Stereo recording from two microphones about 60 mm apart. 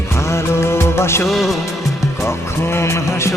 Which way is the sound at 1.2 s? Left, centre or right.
Centre.